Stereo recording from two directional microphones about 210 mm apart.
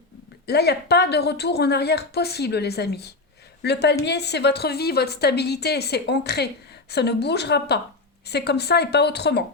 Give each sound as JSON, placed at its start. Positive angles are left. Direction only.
{"t": 0.4, "sound": "a woman's voice", "side_deg": 50}